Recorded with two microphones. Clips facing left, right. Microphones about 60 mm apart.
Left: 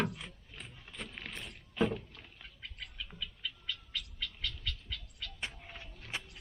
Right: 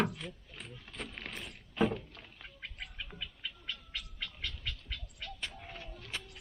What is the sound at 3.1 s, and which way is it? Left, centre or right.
Bird, right.